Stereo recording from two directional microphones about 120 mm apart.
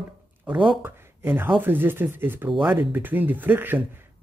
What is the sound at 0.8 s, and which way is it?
Speech, 15° right (ahead or behind).